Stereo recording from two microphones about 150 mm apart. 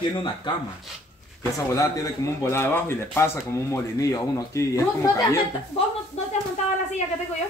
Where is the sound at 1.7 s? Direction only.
20° left (ahead or behind).